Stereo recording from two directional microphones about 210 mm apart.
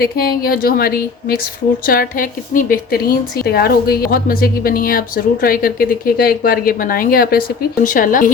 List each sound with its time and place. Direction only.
0.0 s a woman's voice: 45° left (ahead or behind)